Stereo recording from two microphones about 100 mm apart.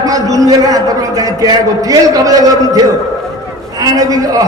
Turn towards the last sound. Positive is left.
turn(degrees=-35)  # may be behind; listen again after turning